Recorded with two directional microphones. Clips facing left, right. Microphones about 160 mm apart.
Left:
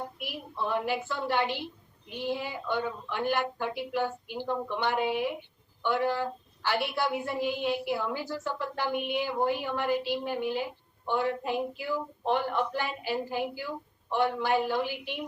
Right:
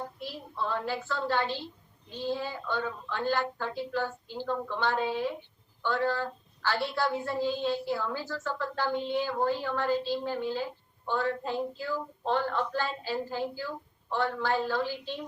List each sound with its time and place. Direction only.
0.0 s a woman's voice: 15° left (ahead or behind)